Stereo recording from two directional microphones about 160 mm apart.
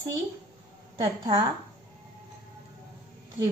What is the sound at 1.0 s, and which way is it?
Speech, 30° right (ahead or behind).